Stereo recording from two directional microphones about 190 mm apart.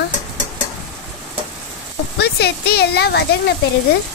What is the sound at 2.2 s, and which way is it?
Speech, 55° left (ahead or behind).